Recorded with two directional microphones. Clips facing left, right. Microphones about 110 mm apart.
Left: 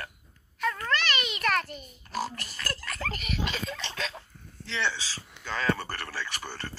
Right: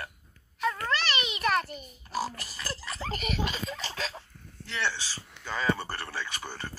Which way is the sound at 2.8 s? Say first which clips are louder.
Left 1 dB; 20° right (ahead or behind).